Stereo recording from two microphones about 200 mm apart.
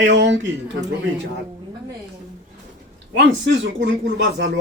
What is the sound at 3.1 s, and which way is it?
Speech, 65° right (ahead or behind).